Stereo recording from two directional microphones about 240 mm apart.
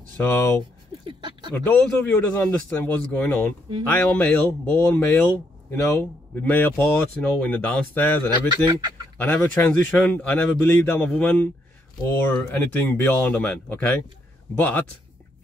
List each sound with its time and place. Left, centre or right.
0.2 s speech: centre
1.0 s a sound: centre
1.5 s speech: centre